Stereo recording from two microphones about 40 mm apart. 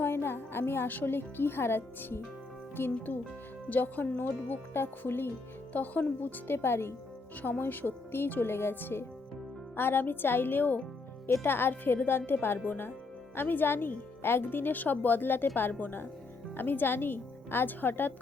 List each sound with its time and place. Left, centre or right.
0.0 s music: left
0.9 s a woman's voice: left
3.7 s speech: left
4.7 s a woman's voice: left
5.7 s speech: left
7.6 s speech: left
11.4 s a woman's voice: left
14.2 s speech: left